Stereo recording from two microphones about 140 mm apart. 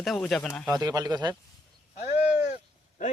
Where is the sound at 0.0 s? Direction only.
Centre (ahead or behind).